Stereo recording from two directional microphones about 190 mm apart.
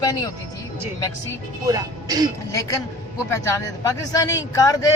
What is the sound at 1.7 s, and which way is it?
Speech, 20° right (ahead or behind).